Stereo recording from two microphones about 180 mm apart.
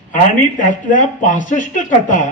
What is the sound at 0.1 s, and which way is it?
Speech, 45° left (ahead or behind).